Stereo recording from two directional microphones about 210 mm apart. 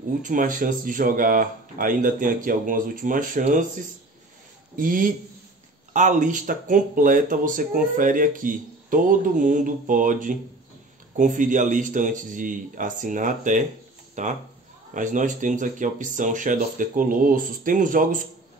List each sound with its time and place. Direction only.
0.2 s speech: 40° right (ahead or behind)